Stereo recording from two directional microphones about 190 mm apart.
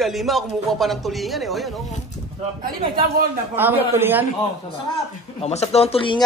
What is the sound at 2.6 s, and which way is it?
Speech, 50° right (ahead or behind).